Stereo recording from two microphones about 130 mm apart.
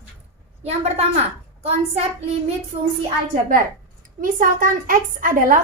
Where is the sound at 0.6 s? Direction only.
55° right (ahead or behind).